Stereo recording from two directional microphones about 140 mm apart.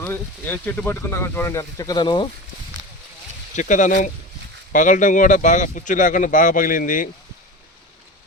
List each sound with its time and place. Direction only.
0.0 s speech: 15° left (ahead or behind); by 2.2 s 35° left (ahead or behind)
3.5 s speech: 60° left (ahead or behind)